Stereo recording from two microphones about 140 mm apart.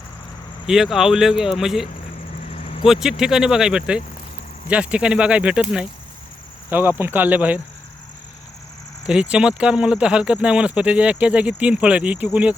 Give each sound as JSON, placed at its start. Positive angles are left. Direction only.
{"t": 0.7, "sound": "speech", "side_deg": -5}
{"t": 2.5, "sound": "vehicle", "side_deg": 45}
{"t": 2.8, "sound": "speech", "side_deg": -5}
{"t": 6.7, "sound": "speech", "side_deg": -15}
{"t": 9.0, "sound": "speech", "side_deg": -5}